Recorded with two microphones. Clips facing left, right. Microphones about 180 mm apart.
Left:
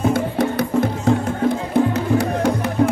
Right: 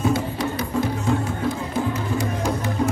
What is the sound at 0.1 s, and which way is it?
Music, 55° left (ahead or behind).